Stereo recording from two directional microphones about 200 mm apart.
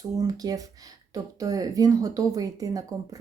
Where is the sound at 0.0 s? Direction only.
20° right (ahead or behind).